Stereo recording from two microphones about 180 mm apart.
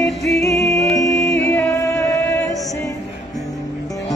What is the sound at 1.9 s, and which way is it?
Music, 15° left (ahead or behind).